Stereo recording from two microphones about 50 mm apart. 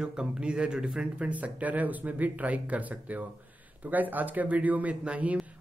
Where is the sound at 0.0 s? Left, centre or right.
Centre.